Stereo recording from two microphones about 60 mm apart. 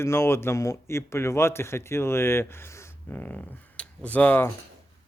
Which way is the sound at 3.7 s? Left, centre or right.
Left.